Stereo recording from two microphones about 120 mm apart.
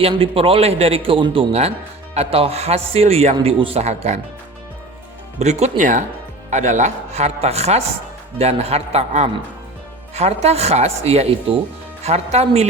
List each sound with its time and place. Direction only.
0.0 s a man's voice: 50° right (ahead or behind); by 4.2 s 65° right (ahead or behind)
5.4 s speech: 70° right (ahead or behind)